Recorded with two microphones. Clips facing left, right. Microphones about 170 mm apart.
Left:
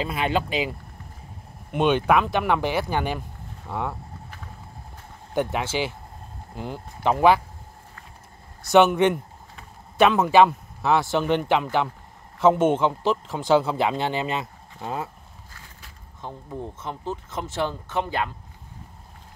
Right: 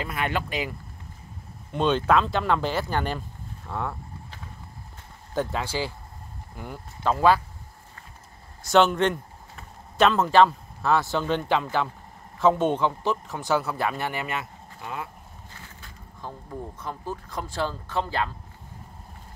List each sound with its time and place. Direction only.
0.0 s speech: 20° left (ahead or behind)
5.3 s speech: 20° left (ahead or behind)
8.7 s speech: 15° left (ahead or behind)
16.2 s speech: 20° left (ahead or behind)